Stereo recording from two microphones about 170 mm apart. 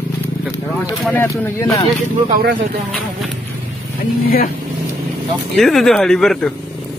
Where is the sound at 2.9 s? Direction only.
Centre (ahead or behind).